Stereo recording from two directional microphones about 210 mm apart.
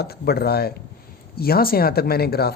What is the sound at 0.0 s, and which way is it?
Speech, 50° left (ahead or behind).